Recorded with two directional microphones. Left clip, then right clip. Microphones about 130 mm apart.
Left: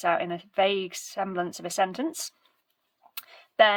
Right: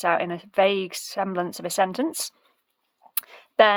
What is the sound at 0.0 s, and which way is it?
Speech, 40° right (ahead or behind).